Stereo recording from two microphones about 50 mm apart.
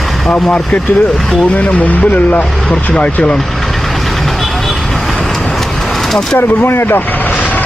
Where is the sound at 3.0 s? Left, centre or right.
Left.